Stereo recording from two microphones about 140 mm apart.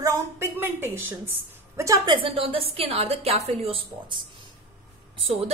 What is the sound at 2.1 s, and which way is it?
A woman's voice, 40° right (ahead or behind).